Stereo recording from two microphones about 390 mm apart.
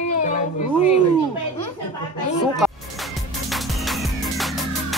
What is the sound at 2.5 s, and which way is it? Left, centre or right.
Music, centre.